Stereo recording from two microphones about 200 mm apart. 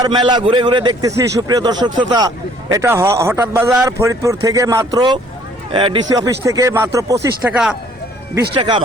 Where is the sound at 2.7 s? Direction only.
15° right (ahead or behind).